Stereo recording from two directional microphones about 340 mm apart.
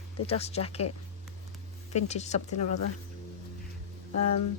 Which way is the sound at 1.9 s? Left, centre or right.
Centre.